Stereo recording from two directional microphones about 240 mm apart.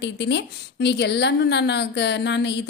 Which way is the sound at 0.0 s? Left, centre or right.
Left.